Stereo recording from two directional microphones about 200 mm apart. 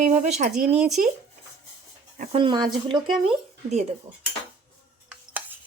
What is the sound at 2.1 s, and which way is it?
Speech, 40° right (ahead or behind).